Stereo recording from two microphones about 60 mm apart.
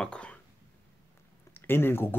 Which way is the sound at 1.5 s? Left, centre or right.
Left.